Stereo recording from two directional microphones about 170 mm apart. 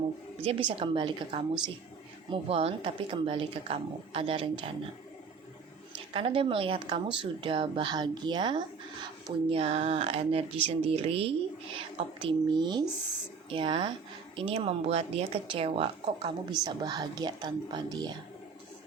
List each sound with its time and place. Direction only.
0.5 s speech: 35° right (ahead or behind)
6.1 s a woman's voice: 35° right (ahead or behind)